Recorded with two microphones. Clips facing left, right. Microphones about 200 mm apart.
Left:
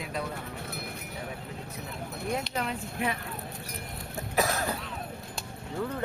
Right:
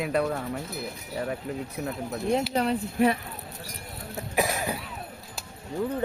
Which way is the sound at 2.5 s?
35° right (ahead or behind).